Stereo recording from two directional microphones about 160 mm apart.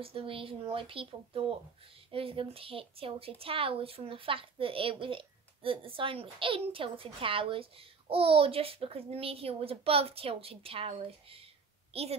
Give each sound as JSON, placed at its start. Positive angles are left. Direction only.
{"t": 0.0, "sound": "a woman's voice", "side_deg": -35}